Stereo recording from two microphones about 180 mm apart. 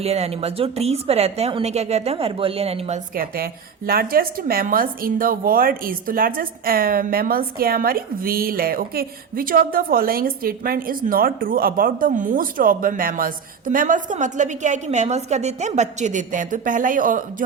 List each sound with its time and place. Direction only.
0.0 s a woman's voice: 35° right (ahead or behind)
3.2 s speech: 55° right (ahead or behind)